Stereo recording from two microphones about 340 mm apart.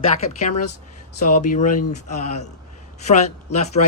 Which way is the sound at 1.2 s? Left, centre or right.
Left.